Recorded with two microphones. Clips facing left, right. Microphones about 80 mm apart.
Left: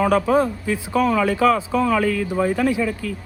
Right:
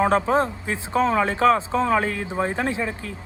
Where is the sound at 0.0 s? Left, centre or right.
Right.